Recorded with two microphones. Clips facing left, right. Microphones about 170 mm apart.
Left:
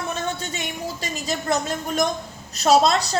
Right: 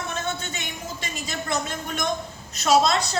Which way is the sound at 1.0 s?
35° left (ahead or behind).